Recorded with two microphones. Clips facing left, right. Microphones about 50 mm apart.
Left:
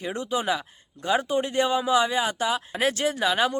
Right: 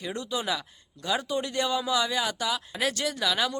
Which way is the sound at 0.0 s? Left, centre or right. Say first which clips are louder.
Left 4 dB; left.